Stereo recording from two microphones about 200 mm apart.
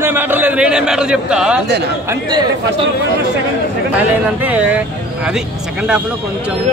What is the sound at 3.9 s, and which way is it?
Speech, 10° right (ahead or behind).